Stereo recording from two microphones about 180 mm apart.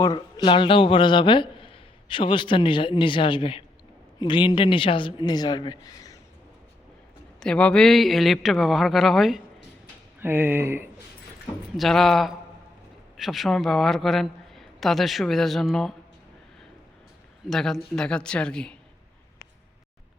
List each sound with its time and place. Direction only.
0.0 s speech: 25° left (ahead or behind)
7.3 s a man's voice: 5° left (ahead or behind)
10.2 s speech: 10° right (ahead or behind)
11.8 s a man's voice: centre (ahead or behind)
17.5 s a man's voice: centre (ahead or behind)